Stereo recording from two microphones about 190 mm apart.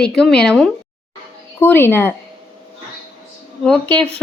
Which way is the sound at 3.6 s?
5° left (ahead or behind).